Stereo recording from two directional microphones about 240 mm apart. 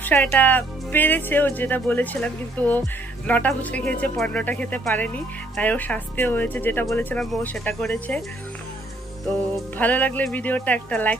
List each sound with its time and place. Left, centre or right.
0.0 s speech: centre
9.8 s speech: centre